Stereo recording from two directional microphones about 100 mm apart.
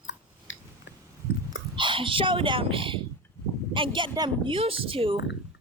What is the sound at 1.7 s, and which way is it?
Speech, 55° right (ahead or behind).